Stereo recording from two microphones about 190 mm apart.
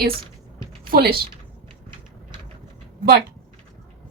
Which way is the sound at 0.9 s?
50° right (ahead or behind).